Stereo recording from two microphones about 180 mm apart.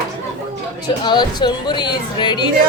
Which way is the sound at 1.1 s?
25° left (ahead or behind).